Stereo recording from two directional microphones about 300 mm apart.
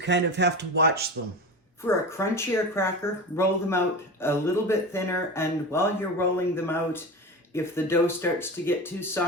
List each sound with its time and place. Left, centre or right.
0.0 s speech: right
1.9 s speech: centre